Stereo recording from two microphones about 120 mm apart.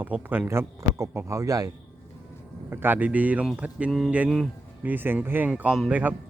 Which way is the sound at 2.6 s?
15° right (ahead or behind).